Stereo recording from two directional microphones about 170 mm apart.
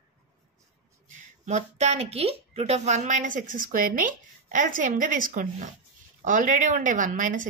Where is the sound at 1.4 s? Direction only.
40° right (ahead or behind).